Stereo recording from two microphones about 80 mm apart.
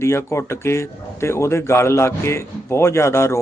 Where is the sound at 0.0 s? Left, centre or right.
Left.